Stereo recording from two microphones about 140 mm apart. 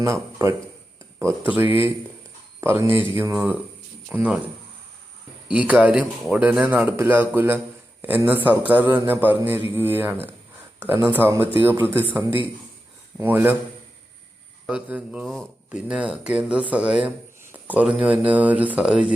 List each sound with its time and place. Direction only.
0.0 s speech: 20° right (ahead or behind)
5.5 s speech: 10° right (ahead or behind)
14.7 s speech: 10° right (ahead or behind)
15.3 s speech: 5° left (ahead or behind)
15.9 s speech: 10° right (ahead or behind)